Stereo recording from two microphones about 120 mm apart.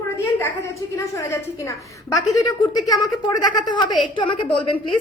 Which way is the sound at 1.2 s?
25° left (ahead or behind).